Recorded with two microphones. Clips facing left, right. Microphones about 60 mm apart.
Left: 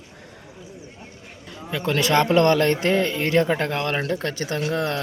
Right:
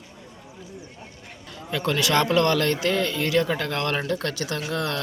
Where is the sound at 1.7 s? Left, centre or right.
Centre.